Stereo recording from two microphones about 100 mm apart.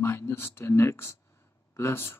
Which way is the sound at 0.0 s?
25° left (ahead or behind).